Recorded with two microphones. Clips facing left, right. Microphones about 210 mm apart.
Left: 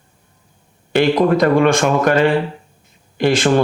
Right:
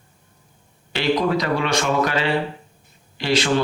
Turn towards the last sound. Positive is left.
turn(degrees=50)  # may be behind; listen again after turning